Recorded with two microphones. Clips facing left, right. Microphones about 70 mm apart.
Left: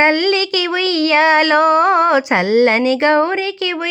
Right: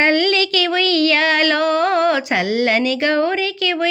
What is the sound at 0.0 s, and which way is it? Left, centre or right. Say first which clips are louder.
Speech: left 2 dB; left.